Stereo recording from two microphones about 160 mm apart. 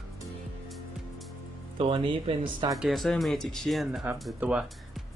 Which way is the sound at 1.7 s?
35° right (ahead or behind).